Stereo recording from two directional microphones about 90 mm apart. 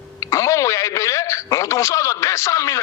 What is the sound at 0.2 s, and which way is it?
Speech, 35° left (ahead or behind).